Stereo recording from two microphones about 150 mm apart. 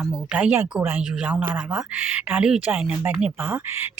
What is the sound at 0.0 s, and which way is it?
Speech, 5° right (ahead or behind).